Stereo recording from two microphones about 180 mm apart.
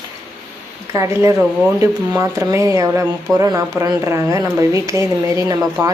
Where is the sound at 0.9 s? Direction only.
15° right (ahead or behind).